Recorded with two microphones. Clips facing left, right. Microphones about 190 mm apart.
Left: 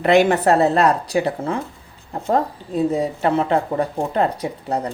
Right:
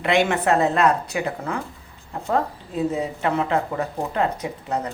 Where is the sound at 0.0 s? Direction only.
40° left (ahead or behind).